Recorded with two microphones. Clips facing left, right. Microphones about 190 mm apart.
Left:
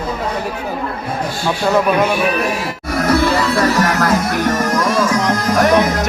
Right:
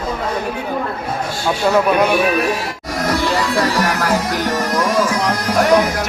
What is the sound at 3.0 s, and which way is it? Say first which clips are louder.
Music: left 4 dB; 15° right (ahead or behind).